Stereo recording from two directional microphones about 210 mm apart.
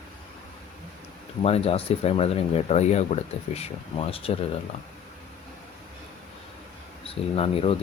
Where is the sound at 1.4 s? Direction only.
30° left (ahead or behind).